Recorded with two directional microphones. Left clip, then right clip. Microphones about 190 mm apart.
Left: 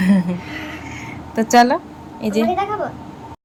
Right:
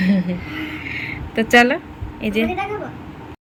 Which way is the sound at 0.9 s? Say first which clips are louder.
Right 5 dB; 5° right (ahead or behind).